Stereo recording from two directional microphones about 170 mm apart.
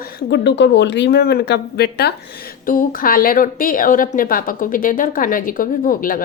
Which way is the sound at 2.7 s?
55° left (ahead or behind).